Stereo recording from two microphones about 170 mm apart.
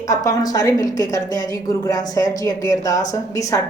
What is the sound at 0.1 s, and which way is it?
A woman's voice, 20° left (ahead or behind).